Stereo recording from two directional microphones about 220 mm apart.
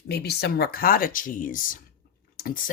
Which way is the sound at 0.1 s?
45° left (ahead or behind).